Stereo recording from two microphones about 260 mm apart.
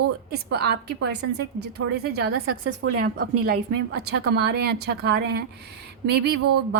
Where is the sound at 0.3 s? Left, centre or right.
Right.